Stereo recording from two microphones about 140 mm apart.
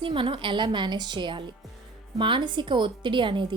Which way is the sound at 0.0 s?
35° right (ahead or behind).